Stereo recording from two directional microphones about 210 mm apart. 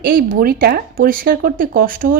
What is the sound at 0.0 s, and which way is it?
Speech, 40° right (ahead or behind).